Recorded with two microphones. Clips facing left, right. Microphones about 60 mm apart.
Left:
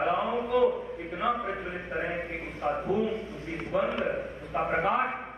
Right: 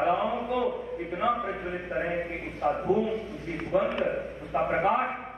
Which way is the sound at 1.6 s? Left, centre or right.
Centre.